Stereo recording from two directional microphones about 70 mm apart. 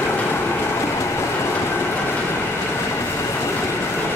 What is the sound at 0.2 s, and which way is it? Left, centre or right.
Vehicle, left.